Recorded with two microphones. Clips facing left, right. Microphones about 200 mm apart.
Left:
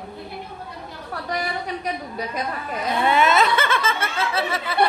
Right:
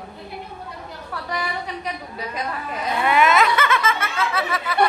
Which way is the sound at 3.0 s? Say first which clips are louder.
Right 1 dB; 30° left (ahead or behind).